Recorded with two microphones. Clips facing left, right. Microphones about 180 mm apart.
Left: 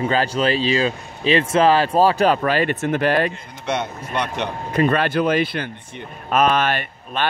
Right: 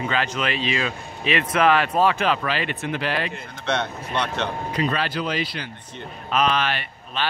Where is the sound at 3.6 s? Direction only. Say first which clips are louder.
Left 1 dB; 10° left (ahead or behind).